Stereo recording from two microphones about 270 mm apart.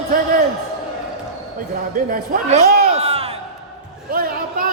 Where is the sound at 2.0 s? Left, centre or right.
Right.